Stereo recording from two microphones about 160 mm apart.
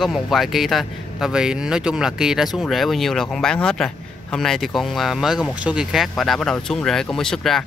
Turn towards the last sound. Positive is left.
turn(degrees=5)  # may be behind; listen again after turning